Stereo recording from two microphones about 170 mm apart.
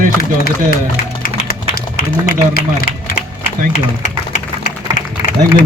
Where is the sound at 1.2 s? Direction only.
60° left (ahead or behind).